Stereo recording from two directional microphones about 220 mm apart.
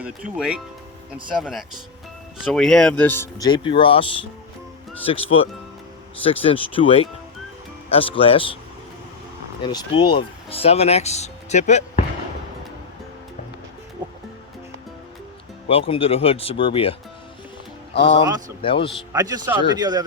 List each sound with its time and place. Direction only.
0.0 s speech: 5° right (ahead or behind); by 4.0 s 25° left (ahead or behind)
5.0 s speech: 25° left (ahead or behind)
9.6 s speech: 20° left (ahead or behind)
15.6 s speech: 25° left (ahead or behind)
18.3 s a man's voice: 15° right (ahead or behind)
18.6 s speech: 25° left (ahead or behind)
19.1 s a man's voice: 15° right (ahead or behind)